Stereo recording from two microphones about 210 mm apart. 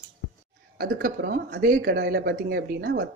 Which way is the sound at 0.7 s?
45° right (ahead or behind).